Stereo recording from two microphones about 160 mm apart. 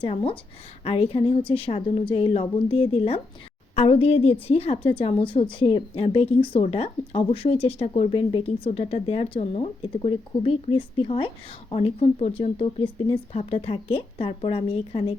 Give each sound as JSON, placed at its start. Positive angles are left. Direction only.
{"t": 0.0, "sound": "a woman's voice", "side_deg": 35}